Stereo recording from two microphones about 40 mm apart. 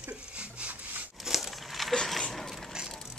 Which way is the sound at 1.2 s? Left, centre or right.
Centre.